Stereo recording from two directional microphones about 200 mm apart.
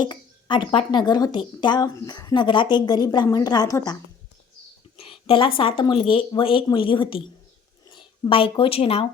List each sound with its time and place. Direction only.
0.0 s speech: 20° left (ahead or behind)
4.9 s a sound: 25° left (ahead or behind)
5.5 s speech: 25° left (ahead or behind)